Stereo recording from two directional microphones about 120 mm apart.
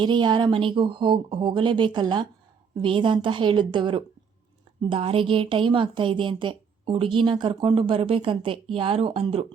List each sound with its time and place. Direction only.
0.0 s a woman's voice: 40° right (ahead or behind)